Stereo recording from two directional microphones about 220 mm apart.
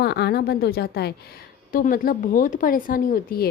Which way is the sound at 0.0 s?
45° left (ahead or behind).